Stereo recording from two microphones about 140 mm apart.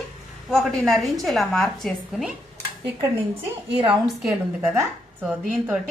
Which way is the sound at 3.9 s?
5° right (ahead or behind).